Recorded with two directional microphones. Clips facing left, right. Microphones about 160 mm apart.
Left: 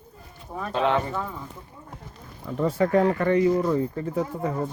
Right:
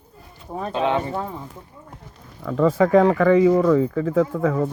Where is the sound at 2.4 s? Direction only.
90° right.